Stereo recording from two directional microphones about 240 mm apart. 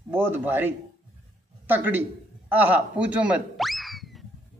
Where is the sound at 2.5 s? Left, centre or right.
Centre.